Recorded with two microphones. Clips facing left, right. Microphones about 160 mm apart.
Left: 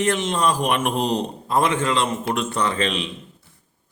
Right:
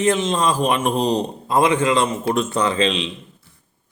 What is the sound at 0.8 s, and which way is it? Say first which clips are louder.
Speech: right 3 dB; 40° right (ahead or behind).